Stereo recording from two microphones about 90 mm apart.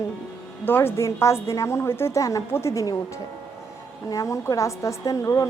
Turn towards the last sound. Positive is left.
turn(degrees=40)  # may be behind; listen again after turning